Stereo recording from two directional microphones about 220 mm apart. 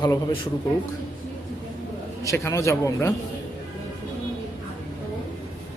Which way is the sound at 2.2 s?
15° left (ahead or behind).